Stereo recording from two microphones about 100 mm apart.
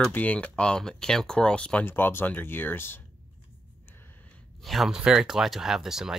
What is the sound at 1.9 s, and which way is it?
Speech, 20° left (ahead or behind).